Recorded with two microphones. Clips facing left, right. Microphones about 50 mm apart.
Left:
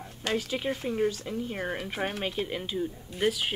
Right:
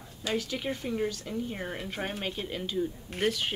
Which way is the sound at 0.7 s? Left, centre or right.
Centre.